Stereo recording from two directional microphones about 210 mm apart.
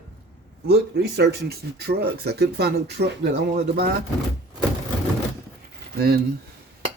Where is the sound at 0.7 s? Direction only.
50° right (ahead or behind).